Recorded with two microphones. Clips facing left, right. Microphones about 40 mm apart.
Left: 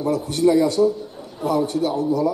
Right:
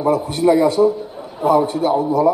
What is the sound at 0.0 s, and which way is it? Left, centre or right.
A man's voice, centre.